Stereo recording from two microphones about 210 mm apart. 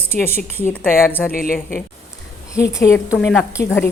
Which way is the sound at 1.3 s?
40° left (ahead or behind).